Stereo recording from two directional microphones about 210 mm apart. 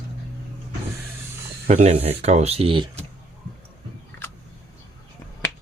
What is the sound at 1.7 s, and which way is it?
Speech, 30° right (ahead or behind).